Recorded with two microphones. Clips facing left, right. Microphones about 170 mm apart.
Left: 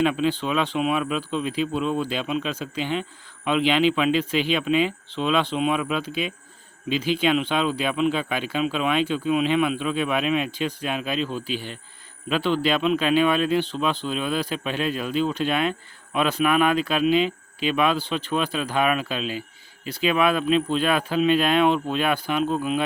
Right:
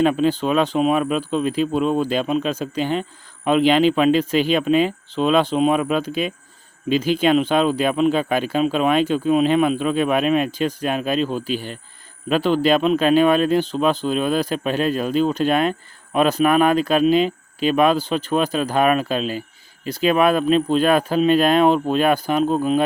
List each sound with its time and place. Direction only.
0.0 s speech: 45° right (ahead or behind)